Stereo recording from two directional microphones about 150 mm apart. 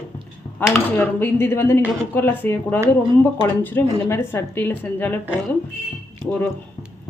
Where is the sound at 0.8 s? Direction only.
10° left (ahead or behind).